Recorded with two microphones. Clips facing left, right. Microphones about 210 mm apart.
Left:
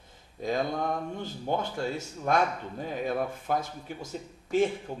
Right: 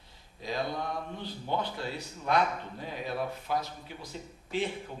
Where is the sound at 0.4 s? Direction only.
50° left (ahead or behind).